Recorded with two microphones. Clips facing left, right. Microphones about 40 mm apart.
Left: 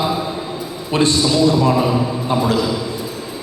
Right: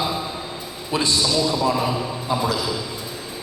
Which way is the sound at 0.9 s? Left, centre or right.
Left.